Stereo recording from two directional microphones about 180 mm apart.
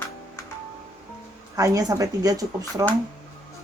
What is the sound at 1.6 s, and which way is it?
Speech, 20° right (ahead or behind).